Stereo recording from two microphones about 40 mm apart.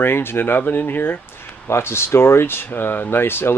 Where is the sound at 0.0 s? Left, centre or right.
Left.